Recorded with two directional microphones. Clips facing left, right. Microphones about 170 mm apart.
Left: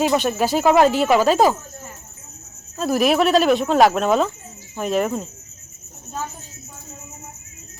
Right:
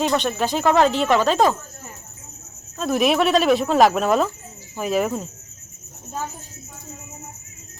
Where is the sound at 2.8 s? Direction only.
Centre (ahead or behind).